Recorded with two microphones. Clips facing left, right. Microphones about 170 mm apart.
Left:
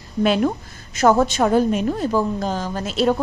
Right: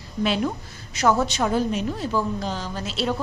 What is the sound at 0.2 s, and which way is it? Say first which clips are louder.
A woman's voice: left 5 dB; 50° left (ahead or behind).